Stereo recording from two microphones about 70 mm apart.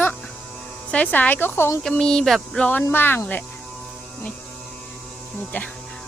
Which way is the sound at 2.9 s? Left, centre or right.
Left.